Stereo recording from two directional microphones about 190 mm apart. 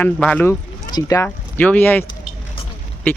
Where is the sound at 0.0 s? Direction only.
10° left (ahead or behind).